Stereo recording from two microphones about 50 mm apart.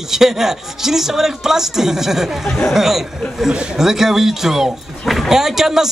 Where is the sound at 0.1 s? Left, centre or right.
Centre.